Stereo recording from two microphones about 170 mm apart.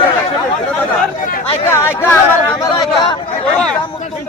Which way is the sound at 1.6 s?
15° left (ahead or behind).